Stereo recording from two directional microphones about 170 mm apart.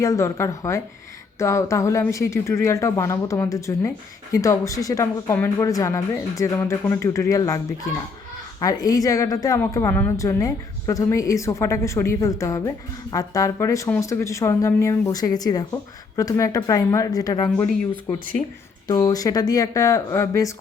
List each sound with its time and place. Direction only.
0.0 s a woman's voice: 20° left (ahead or behind)
8.6 s a woman's voice: 20° left (ahead or behind)
18.9 s a woman's voice: 25° left (ahead or behind)